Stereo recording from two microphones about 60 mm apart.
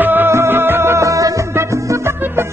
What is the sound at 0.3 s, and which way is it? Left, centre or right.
Music, right.